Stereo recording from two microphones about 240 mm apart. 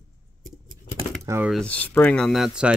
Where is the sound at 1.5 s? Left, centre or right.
Centre.